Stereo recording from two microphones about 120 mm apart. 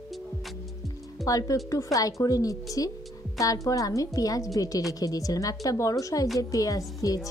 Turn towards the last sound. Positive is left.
turn(degrees=30)  # may be behind; listen again after turning